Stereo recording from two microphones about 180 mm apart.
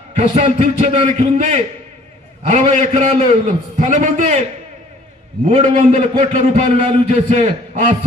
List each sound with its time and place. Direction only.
0.2 s a man's voice: 40° right (ahead or behind)
5.5 s a man's voice: 40° right (ahead or behind)